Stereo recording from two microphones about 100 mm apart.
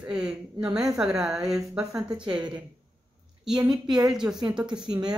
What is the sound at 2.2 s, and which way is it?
Speech, 50° right (ahead or behind).